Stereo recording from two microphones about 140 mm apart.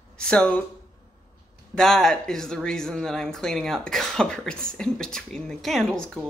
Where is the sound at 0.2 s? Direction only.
10° left (ahead or behind).